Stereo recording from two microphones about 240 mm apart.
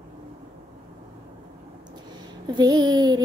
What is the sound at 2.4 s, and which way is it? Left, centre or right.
Child singing, centre.